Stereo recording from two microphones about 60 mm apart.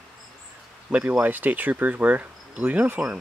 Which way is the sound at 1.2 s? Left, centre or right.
Right.